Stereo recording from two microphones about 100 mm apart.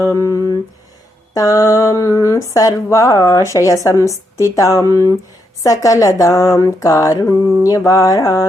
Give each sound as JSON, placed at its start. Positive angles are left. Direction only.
{"t": 0.0, "sound": "speech", "side_deg": 30}